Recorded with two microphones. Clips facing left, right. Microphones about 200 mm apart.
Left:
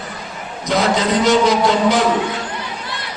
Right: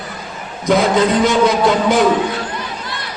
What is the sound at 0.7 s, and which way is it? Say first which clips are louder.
A man's voice: right 4 dB; 50° right (ahead or behind).